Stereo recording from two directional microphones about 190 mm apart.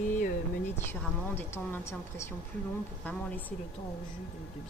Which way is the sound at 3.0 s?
10° left (ahead or behind).